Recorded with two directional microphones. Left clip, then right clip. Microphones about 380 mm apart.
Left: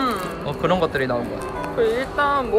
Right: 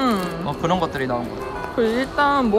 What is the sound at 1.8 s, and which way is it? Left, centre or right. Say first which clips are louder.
Speech: right 1 dB; right.